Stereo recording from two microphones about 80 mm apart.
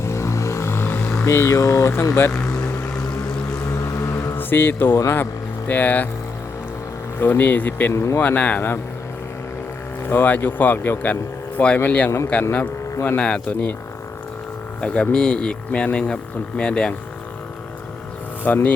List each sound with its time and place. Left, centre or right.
0.0 s vehicle: left
1.2 s speech: left
3.9 s music: left
4.4 s speech: left
7.2 s speech: left
7.9 s speech: left
8.2 s speech: centre
10.1 s speech: left
14.8 s speech: centre
18.4 s speech: left